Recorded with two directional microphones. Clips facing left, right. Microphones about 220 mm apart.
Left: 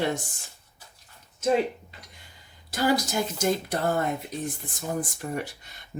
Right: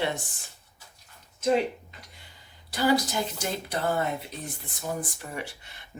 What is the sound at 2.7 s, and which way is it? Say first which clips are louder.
Speech: even; 45° left (ahead or behind).